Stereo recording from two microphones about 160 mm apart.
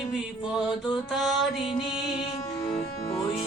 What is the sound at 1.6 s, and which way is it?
Mantra, 30° left (ahead or behind).